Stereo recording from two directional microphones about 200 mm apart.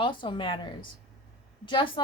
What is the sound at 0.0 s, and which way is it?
A woman's voice, 25° left (ahead or behind).